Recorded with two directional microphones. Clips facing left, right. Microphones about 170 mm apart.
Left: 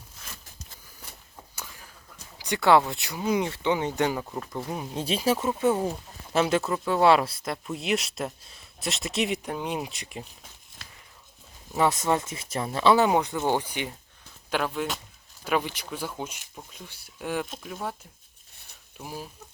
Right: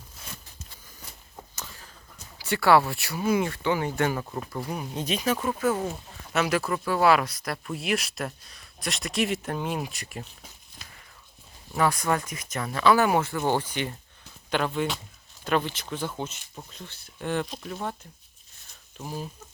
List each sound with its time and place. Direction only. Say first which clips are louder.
1.5 s a sound: left 1 dB; 15° left (ahead or behind)
2.4 s speech: even; 20° left (ahead or behind)
11.7 s speech: left 1 dB; 25° left (ahead or behind); by 17.9 s 5° left (ahead or behind)
18.9 s speech: right 3 dB; 5° left (ahead or behind)